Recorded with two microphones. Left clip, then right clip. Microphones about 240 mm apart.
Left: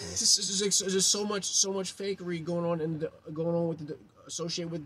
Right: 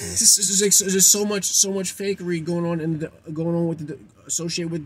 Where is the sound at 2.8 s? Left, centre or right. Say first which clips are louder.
Right 5 dB; centre.